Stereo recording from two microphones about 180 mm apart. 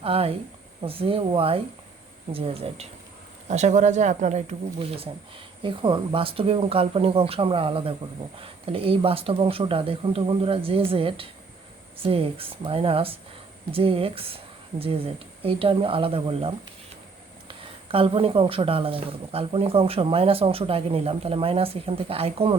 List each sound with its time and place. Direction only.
0.0 s speech: 30° right (ahead or behind)
17.5 s speech: 30° right (ahead or behind)